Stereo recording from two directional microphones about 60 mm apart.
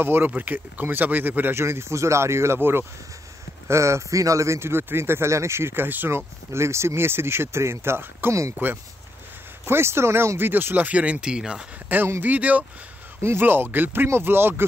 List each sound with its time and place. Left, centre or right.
0.0 s speech: right
1.5 s speech: right
3.6 s speech: right
10.5 s speech: right; by 11.6 s centre
12.2 s speech: right
13.2 s speech: right